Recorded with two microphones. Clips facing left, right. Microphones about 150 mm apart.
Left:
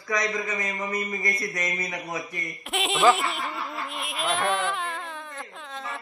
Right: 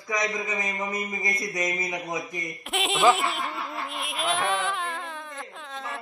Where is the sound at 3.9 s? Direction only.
Centre (ahead or behind).